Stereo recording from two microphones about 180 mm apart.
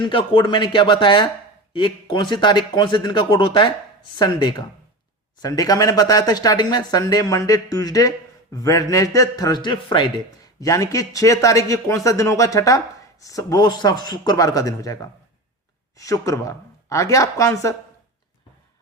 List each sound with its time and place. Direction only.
0.0 s a man's voice: 30° left (ahead or behind)
16.0 s speech: 20° left (ahead or behind)